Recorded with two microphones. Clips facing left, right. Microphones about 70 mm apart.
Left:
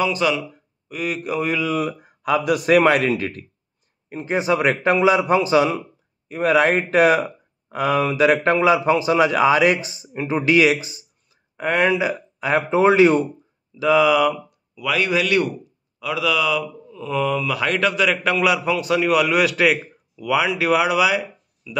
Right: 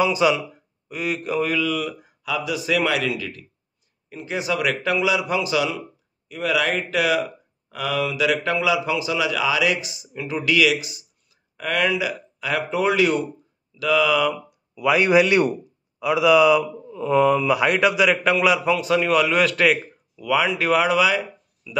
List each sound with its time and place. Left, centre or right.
0.0 s speech: centre
1.5 s speech: centre
1.8 s speech: left
14.1 s speech: centre
14.8 s speech: right; by 21.7 s centre